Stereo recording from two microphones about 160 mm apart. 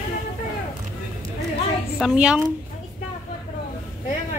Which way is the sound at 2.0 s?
5° right (ahead or behind).